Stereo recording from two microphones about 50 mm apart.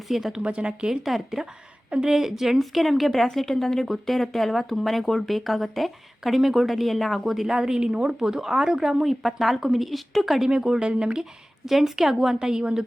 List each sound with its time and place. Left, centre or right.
0.1 s a woman's voice: centre
0.4 s speech: right
0.9 s a woman's voice: centre
10.8 s speech: right
11.2 s a woman's voice: centre